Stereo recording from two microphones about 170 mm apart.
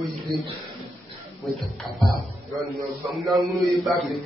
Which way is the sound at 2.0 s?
Centre (ahead or behind).